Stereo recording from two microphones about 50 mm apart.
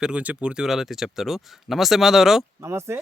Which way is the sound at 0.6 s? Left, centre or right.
Centre.